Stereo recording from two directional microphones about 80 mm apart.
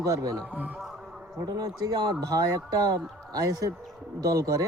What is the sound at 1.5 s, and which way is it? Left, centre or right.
Speech, right.